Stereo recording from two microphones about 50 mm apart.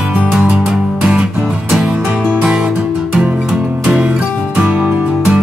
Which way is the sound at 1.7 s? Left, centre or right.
Centre.